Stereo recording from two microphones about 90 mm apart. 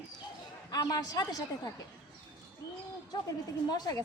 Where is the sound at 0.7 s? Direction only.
45° left (ahead or behind).